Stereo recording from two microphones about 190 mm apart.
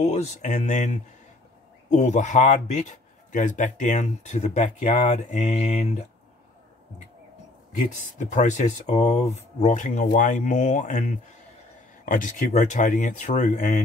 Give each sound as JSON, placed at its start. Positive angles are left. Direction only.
{"t": 0.1, "sound": "a man's voice", "side_deg": 35}
{"t": 8.0, "sound": "a man's voice", "side_deg": 40}